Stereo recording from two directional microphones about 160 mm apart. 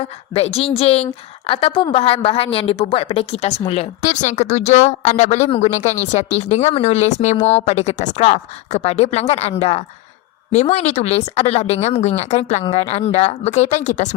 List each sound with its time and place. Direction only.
0.3 s a woman's voice: 40° left (ahead or behind)